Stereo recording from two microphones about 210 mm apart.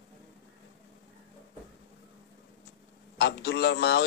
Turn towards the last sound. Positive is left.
turn(degrees=55)  # may be behind; listen again after turning